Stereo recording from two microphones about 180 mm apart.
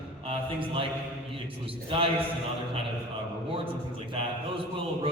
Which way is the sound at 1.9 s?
30° right (ahead or behind).